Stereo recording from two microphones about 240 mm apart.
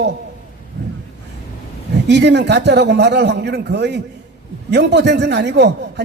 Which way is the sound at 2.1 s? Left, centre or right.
Right.